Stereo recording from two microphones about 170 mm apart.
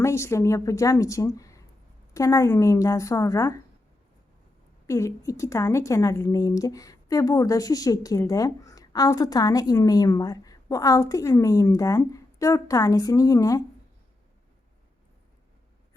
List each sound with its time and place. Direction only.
0.0 s a woman's voice: 15° left (ahead or behind)
4.9 s a woman's voice: 20° left (ahead or behind)